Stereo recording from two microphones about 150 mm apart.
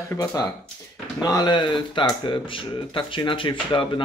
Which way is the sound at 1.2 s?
25° left (ahead or behind).